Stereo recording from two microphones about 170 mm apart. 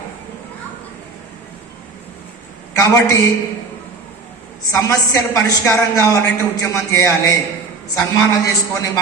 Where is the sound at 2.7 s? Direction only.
20° left (ahead or behind).